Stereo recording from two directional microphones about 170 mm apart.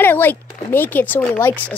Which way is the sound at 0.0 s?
10° left (ahead or behind).